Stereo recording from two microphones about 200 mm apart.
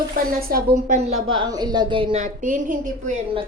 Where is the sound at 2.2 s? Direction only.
40° right (ahead or behind).